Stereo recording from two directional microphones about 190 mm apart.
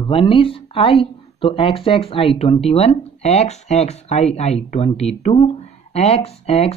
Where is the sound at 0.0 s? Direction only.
25° left (ahead or behind).